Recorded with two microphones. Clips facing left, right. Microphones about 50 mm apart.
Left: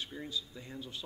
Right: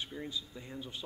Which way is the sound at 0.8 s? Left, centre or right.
Centre.